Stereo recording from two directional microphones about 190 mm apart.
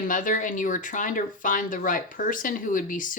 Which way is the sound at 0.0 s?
45° left (ahead or behind).